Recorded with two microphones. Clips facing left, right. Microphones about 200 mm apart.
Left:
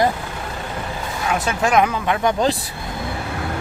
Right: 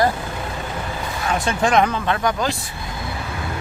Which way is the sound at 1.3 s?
5° left (ahead or behind).